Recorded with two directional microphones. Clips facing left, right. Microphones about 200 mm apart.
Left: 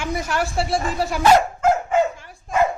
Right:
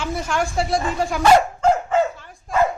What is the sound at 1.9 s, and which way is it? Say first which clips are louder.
Dog: even; 15° left (ahead or behind).